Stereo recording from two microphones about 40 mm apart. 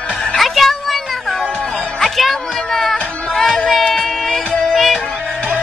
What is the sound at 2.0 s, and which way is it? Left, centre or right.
Music, centre.